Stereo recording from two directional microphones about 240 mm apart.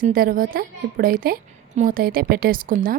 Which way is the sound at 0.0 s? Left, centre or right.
Right.